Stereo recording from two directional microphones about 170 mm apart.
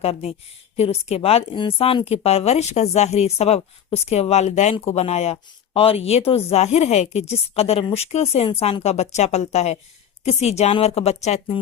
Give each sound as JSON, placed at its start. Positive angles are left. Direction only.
{"t": 0.0, "sound": "speech", "side_deg": 35}